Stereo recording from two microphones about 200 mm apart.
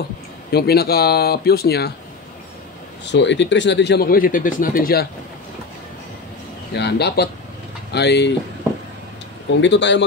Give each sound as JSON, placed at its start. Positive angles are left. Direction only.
{"t": 0.5, "sound": "speech", "side_deg": 50}
{"t": 3.1, "sound": "speech", "side_deg": 60}
{"t": 6.7, "sound": "speech", "side_deg": 55}
{"t": 9.6, "sound": "speech", "side_deg": 60}